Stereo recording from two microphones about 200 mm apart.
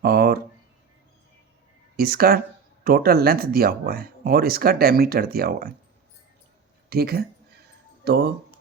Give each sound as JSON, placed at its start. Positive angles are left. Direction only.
{"t": 0.0, "sound": "a sound", "side_deg": -50}
{"t": 2.0, "sound": "speech", "side_deg": -50}
{"t": 6.9, "sound": "speech", "side_deg": -50}